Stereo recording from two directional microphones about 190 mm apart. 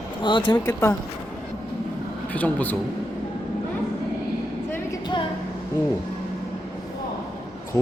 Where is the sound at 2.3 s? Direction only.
10° left (ahead or behind).